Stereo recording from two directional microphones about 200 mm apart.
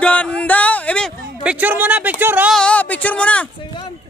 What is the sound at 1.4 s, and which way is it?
Speech, 10° right (ahead or behind).